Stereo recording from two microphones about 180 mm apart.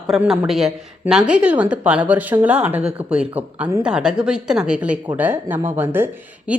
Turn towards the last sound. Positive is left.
turn(degrees=-10)  # may be behind; listen again after turning